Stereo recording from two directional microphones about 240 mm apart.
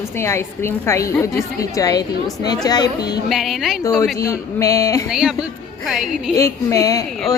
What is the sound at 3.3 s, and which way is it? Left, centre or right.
Speech, centre.